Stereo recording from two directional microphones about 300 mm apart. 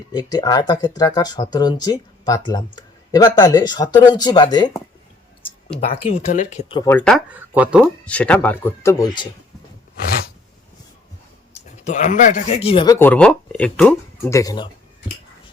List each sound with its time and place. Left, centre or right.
0.1 s speech: centre
5.8 s speech: centre
10.0 s a sound: left
11.9 s speech: left